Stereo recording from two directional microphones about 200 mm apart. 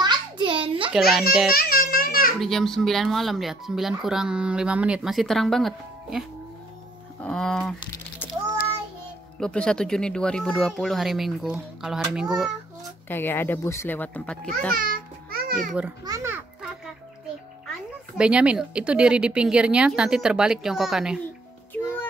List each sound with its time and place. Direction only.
0.0 s a sound: 25° right (ahead or behind)
0.9 s speech: centre (ahead or behind)
1.6 s a sound: 45° left (ahead or behind)
2.4 s speech: centre (ahead or behind)
9.4 s speech: 5° left (ahead or behind)
13.1 s a child's voice: 10° left (ahead or behind)
14.7 s music: 45° right (ahead or behind)
16.1 s music: 15° right (ahead or behind)
18.1 s speech: 5° right (ahead or behind)